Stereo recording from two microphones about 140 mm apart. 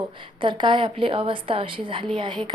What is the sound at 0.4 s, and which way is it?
A woman's voice, 35° right (ahead or behind).